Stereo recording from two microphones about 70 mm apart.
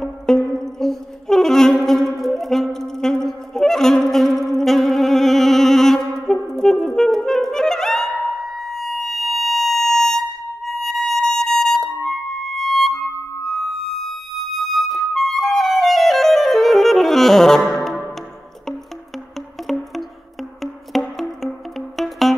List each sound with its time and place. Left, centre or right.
0.0 s saxophone: centre
19.7 s music: centre